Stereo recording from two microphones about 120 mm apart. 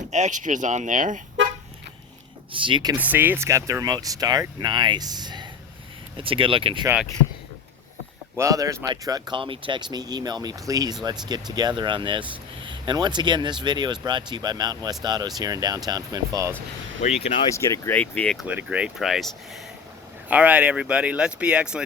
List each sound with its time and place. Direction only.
0.1 s speech: 85° right
2.5 s speech: 45° right (ahead or behind)
2.9 s speech: 15° right (ahead or behind); by 5.5 s 35° right (ahead or behind)
6.1 s speech: 45° right (ahead or behind)
8.4 s speech: 25° right (ahead or behind)
17.0 s speech: 75° left (ahead or behind)
17.5 s speech: 25° left (ahead or behind)
17.9 s speech: 10° left (ahead or behind)
18.4 s speech: 10° right (ahead or behind)
18.9 s speech: centre (ahead or behind)
20.2 s speech: 10° right (ahead or behind)